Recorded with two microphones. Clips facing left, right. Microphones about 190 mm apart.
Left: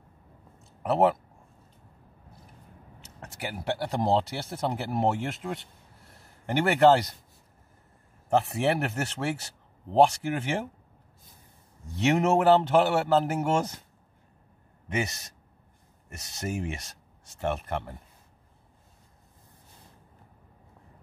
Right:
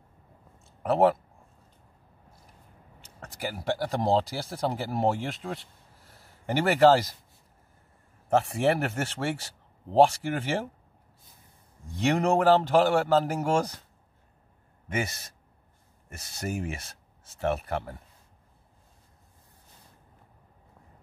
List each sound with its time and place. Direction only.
0.7 s a sound: centre (ahead or behind)
3.3 s speech: centre (ahead or behind)
8.3 s speech: centre (ahead or behind)
11.9 s speech: centre (ahead or behind)
15.0 s speech: centre (ahead or behind)